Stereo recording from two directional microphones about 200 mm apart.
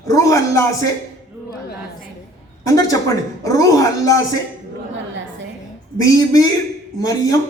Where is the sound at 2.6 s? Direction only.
15° left (ahead or behind).